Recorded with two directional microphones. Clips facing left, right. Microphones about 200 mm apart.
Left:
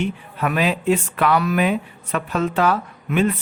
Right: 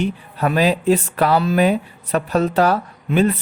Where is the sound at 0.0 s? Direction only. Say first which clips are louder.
Right 3 dB; 35° right (ahead or behind).